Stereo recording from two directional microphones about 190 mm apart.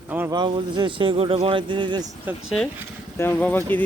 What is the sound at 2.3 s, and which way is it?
Speech, 10° right (ahead or behind).